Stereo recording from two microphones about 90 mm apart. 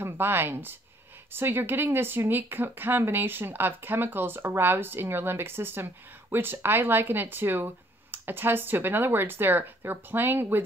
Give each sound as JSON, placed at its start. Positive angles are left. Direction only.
{"t": 0.0, "sound": "speech", "side_deg": -25}